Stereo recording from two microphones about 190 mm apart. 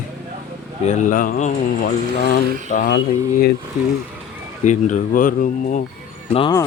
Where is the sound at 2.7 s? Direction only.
45° left (ahead or behind).